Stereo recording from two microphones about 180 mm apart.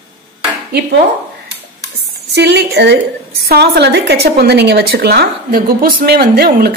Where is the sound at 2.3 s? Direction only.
70° right (ahead or behind).